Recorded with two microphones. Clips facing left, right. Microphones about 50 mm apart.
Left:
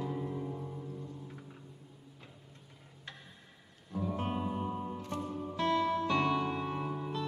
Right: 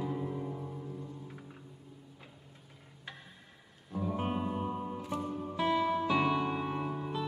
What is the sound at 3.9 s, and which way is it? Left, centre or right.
Music, centre.